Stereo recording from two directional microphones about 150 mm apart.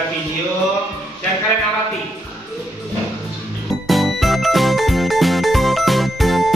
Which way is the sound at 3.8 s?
Centre (ahead or behind).